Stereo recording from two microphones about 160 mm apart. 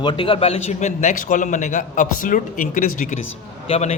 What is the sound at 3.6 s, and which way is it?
Speech, 40° left (ahead or behind).